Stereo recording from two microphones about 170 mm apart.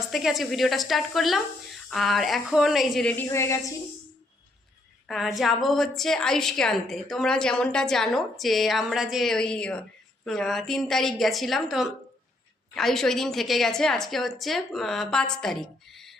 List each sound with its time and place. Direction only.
0.1 s a woman's voice: centre (ahead or behind)
3.2 s speech: 15° left (ahead or behind)
5.0 s a woman's voice: centre (ahead or behind)